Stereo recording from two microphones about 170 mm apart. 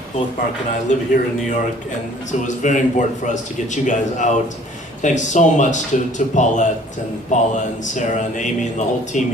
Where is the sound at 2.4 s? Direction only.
45° left (ahead or behind).